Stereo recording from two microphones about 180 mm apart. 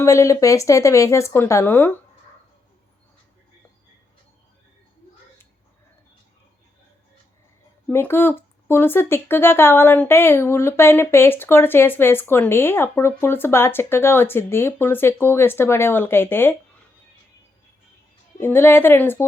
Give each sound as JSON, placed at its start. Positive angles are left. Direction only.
{"t": 0.0, "sound": "speech", "side_deg": 15}
{"t": 7.9, "sound": "speech", "side_deg": 10}
{"t": 18.3, "sound": "speech", "side_deg": 10}